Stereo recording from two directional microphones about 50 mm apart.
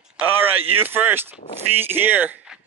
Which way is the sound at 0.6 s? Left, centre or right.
Right.